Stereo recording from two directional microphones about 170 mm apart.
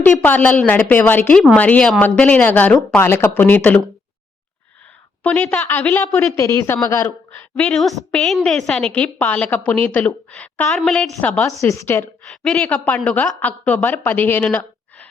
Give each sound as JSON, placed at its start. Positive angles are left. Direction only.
{"t": 0.0, "sound": "a woman's voice", "side_deg": 10}
{"t": 5.2, "sound": "a woman's voice", "side_deg": 5}
{"t": 7.3, "sound": "a woman's voice", "side_deg": 5}
{"t": 11.2, "sound": "a woman's voice", "side_deg": 15}
{"t": 12.3, "sound": "a woman's voice", "side_deg": 5}